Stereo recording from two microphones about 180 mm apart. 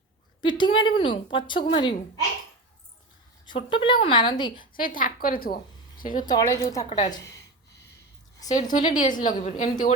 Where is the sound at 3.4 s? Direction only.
30° left (ahead or behind).